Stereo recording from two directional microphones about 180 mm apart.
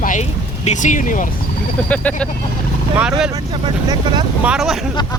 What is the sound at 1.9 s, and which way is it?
Speech, 10° left (ahead or behind).